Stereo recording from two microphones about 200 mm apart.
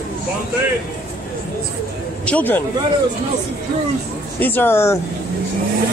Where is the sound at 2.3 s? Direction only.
10° left (ahead or behind).